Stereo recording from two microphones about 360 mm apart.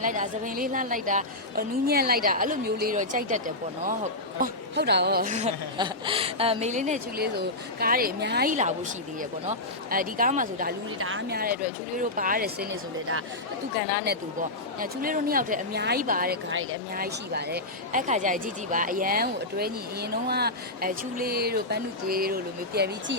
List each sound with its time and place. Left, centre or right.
0.0 s speech: right
13.7 s speech: right